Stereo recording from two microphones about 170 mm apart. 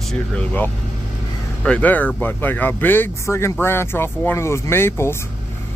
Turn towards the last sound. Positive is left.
turn(degrees=15)  # may be behind; listen again after turning